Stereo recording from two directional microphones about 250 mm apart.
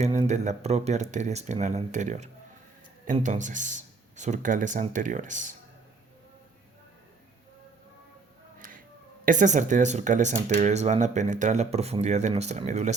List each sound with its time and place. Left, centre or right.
0.0 s speech: right
8.5 s music: right
9.2 s speech: right